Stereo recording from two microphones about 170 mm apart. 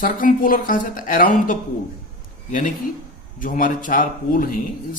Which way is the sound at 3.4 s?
55° left (ahead or behind).